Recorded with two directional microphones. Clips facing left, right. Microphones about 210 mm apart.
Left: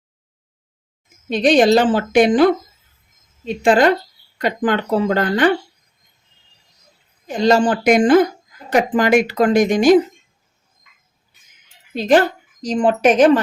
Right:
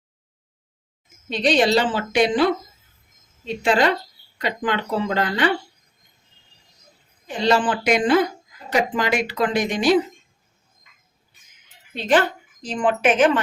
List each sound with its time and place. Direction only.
1.3 s speech: 50° left (ahead or behind)
7.3 s speech: 45° left (ahead or behind)
11.9 s a woman's voice: 40° left (ahead or behind)